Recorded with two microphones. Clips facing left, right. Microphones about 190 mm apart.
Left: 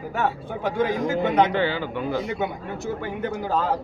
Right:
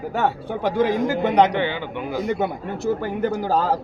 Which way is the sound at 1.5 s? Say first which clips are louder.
Even; 20° right (ahead or behind).